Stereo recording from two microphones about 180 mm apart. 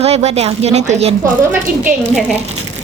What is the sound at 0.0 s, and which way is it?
A woman's voice, 35° right (ahead or behind).